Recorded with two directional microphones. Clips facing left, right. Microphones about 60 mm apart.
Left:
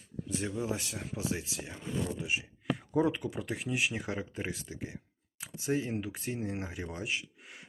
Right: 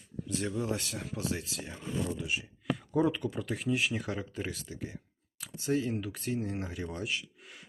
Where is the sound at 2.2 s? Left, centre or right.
Left.